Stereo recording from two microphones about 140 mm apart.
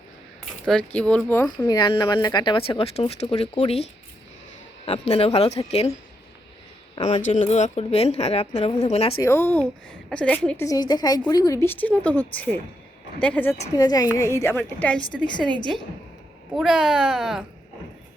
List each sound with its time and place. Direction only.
0.6 s speech: 5° left (ahead or behind)
1.6 s a woman's voice: 30° left (ahead or behind); by 3.8 s 50° left (ahead or behind)
4.9 s a woman's voice: 45° left (ahead or behind)
7.0 s a woman's voice: 60° left (ahead or behind)
9.2 s speech: 20° left (ahead or behind)
10.7 s a woman's voice: 30° left (ahead or behind); by 13.6 s 10° left (ahead or behind)
13.7 s a woman's voice: 25° left (ahead or behind); by 17.4 s centre (ahead or behind)